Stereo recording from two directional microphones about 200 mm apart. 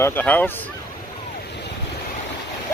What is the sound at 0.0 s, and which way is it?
Speech, 10° left (ahead or behind).